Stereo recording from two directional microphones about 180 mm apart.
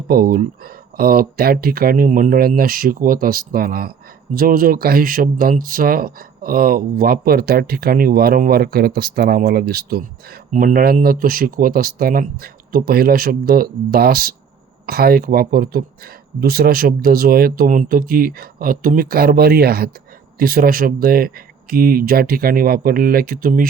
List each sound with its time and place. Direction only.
0.1 s speech: 55° right (ahead or behind)